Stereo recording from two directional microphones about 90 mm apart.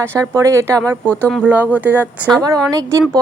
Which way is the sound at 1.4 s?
15° right (ahead or behind).